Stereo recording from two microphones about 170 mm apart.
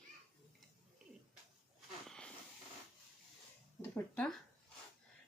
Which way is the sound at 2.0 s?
5° left (ahead or behind).